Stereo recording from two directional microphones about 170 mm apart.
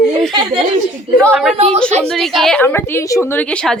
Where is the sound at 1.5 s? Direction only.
40° right (ahead or behind).